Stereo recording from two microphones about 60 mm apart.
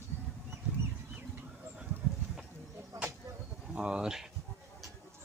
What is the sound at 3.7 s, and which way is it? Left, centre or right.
Speech, centre.